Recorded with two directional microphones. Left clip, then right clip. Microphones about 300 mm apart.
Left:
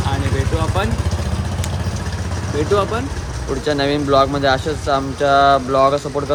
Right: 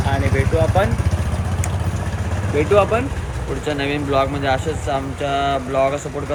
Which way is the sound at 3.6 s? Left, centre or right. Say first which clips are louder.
Left 5 dB; centre.